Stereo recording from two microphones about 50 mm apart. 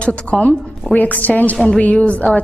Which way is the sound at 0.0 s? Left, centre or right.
Left.